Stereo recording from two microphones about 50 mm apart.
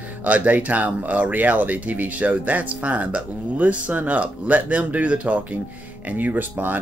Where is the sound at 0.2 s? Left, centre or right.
Right.